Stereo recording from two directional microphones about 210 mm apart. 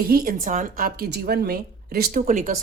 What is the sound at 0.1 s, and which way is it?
A woman's voice, 45° right (ahead or behind).